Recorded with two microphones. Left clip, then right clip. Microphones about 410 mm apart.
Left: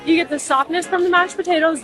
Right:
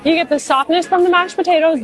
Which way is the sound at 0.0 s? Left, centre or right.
Right.